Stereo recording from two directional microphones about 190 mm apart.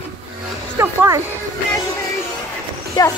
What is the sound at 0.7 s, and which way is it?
Speech, 15° right (ahead or behind).